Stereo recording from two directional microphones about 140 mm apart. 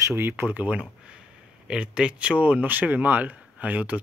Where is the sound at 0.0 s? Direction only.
15° right (ahead or behind).